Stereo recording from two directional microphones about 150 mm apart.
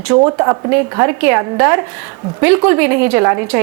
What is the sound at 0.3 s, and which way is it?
A woman's voice, 25° right (ahead or behind).